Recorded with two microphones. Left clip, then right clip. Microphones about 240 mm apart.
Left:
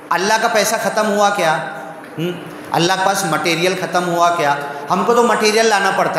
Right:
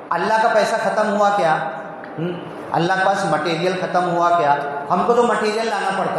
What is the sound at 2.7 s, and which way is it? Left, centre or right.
A man's voice, left.